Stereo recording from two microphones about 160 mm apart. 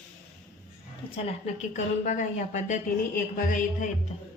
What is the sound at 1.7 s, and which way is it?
Speech, 50° left (ahead or behind).